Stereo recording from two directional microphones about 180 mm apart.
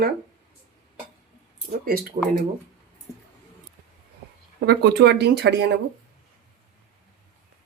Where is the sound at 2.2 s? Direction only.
40° right (ahead or behind).